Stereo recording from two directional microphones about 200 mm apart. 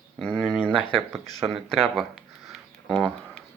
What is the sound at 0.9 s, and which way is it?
Speech, 5° left (ahead or behind).